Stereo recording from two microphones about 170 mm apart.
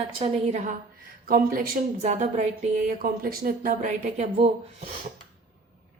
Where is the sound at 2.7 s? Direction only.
60° right (ahead or behind).